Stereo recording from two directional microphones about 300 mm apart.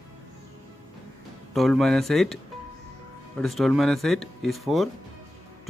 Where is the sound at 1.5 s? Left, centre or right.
Centre.